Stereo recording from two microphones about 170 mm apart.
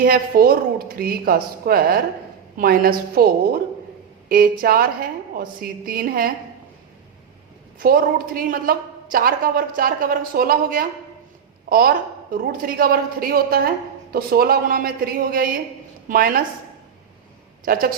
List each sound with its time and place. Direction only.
0.0 s a woman's voice: 60° right (ahead or behind)
7.8 s a woman's voice: 60° right (ahead or behind)